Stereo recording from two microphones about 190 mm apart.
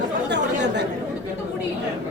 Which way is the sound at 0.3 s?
65° right (ahead or behind).